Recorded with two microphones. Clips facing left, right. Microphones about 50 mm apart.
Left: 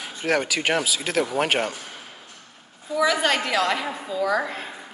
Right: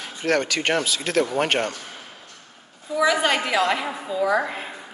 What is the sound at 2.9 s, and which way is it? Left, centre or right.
A woman's voice, centre.